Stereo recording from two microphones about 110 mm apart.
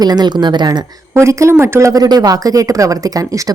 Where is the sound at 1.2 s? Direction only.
25° right (ahead or behind).